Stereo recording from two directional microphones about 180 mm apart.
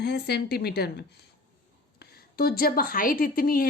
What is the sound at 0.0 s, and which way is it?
A woman's voice, 65° left (ahead or behind).